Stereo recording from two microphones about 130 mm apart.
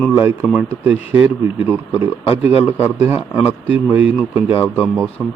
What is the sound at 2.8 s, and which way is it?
Speech, 15° right (ahead or behind).